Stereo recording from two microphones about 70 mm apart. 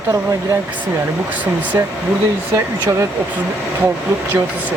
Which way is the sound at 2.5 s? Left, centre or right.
Right.